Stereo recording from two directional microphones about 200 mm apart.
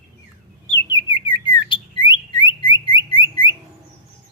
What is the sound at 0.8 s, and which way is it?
Bird, 20° left (ahead or behind).